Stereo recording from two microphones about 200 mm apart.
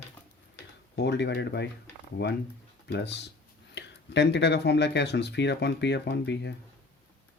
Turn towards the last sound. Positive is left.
turn(degrees=60)  # may be behind; listen again after turning